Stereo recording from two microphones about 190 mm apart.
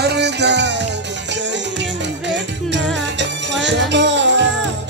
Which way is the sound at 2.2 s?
70° right (ahead or behind).